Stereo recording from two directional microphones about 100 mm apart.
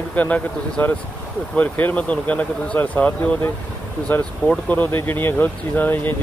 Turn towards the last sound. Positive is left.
turn(degrees=20)  # may be behind; listen again after turning